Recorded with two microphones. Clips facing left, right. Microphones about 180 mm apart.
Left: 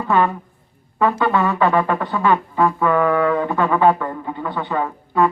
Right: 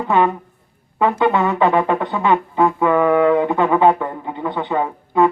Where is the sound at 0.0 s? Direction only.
20° right (ahead or behind).